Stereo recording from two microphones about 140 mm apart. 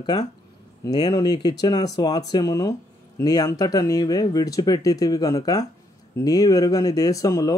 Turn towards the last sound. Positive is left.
turn(degrees=25)  # may be behind; listen again after turning